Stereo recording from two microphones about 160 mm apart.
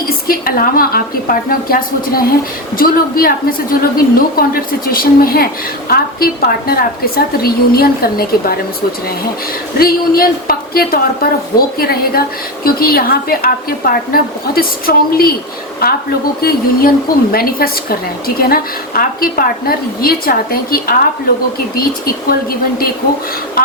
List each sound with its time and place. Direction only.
0.3 s a woman's voice: 65° left (ahead or behind)
9.7 s a woman's voice: 65° left (ahead or behind)